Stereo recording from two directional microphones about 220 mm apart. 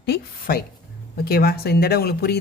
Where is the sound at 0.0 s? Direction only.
45° left (ahead or behind).